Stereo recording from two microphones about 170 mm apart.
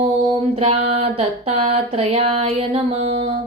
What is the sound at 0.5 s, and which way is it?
Female singing, 35° right (ahead or behind).